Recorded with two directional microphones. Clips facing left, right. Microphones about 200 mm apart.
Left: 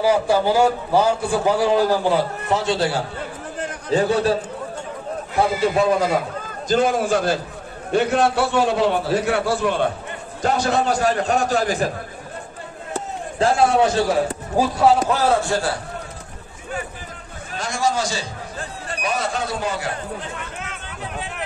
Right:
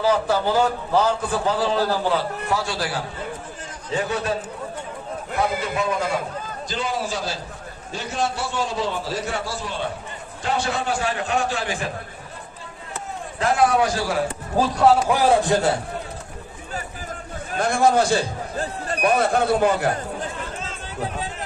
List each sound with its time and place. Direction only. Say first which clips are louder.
0.0 s a man's voice: left 3 dB; 10° left (ahead or behind); by 4.4 s 30° left (ahead or behind)
6.7 s a man's voice: left 9 dB; 50° left (ahead or behind)
10.4 s a man's voice: left 5 dB; 45° left (ahead or behind)
12.9 s a sound: left 4 dB; 30° left (ahead or behind)
14.6 s speech: even; 5° left (ahead or behind)
15.0 s a man's voice: right 1 dB; 15° right (ahead or behind)
17.6 s speech: right 4 dB; 55° right (ahead or behind)
20.5 s a sound: right 1 dB; 65° left (ahead or behind)